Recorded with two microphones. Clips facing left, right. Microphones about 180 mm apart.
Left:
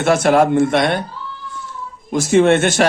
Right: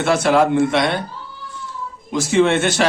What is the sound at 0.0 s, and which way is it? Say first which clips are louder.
Speech: left 2 dB; 50° left (ahead or behind).